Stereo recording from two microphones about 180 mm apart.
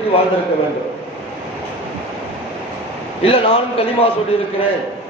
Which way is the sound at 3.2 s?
30° left (ahead or behind).